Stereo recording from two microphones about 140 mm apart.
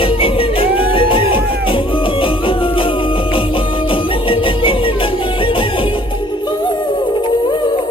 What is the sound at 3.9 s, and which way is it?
Music, 40° left (ahead or behind).